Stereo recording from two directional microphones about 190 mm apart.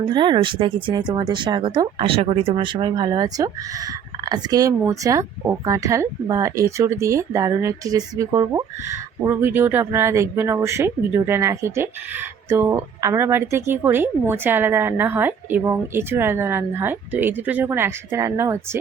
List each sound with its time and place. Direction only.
0.1 s speech: 25° right (ahead or behind)